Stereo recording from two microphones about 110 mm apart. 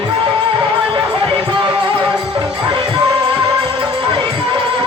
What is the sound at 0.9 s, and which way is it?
Music, 50° right (ahead or behind).